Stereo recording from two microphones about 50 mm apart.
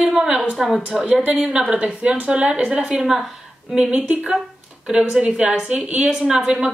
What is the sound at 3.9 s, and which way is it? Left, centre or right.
Speech, right.